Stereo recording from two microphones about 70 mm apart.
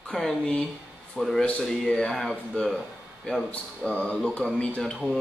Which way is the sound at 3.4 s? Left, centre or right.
Centre.